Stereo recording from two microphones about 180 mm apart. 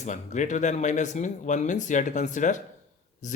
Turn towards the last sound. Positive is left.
turn(degrees=45)  # may be behind; listen again after turning